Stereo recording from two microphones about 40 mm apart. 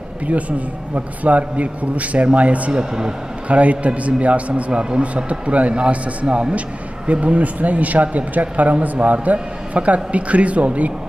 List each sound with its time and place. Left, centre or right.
0.3 s a man's voice: right
2.7 s speech: centre
3.4 s a man's voice: right